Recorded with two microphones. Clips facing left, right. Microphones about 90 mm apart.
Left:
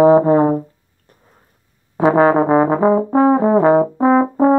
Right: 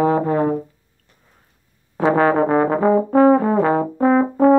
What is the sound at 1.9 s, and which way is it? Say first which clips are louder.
Trombone: left 3 dB; 20° left (ahead or behind).